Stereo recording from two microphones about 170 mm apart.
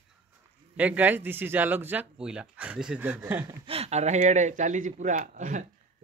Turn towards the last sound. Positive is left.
turn(degrees=-50)  # may be behind; listen again after turning